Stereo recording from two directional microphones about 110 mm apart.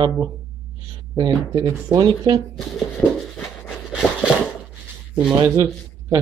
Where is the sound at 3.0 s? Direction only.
5° left (ahead or behind).